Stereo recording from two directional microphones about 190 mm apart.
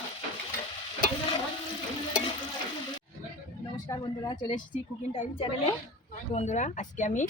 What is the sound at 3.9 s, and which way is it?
Speech, 25° left (ahead or behind).